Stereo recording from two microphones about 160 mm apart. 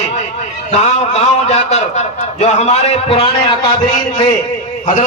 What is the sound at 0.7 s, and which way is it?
A man's voice, 45° left (ahead or behind).